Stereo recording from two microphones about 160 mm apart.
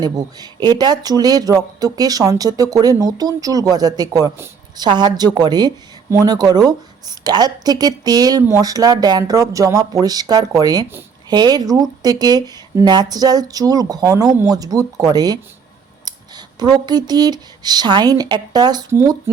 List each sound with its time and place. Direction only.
0.0 s speech: 25° right (ahead or behind)